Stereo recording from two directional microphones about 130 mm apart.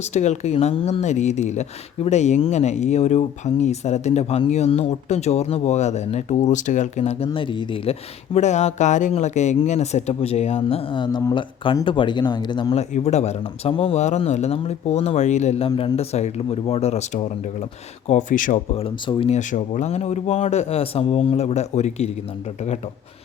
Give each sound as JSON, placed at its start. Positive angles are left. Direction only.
{"t": 0.0, "sound": "speech", "side_deg": 60}
{"t": 1.0, "sound": "speech", "side_deg": 65}
{"t": 7.3, "sound": "speech", "side_deg": 40}
{"t": 12.7, "sound": "speech", "side_deg": 55}
{"t": 13.4, "sound": "speech", "side_deg": 45}
{"t": 18.1, "sound": "speech", "side_deg": 75}
{"t": 18.7, "sound": "speech", "side_deg": 45}
{"t": 19.3, "sound": "speech", "side_deg": 75}